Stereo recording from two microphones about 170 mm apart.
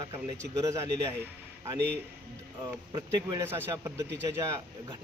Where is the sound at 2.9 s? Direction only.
25° right (ahead or behind).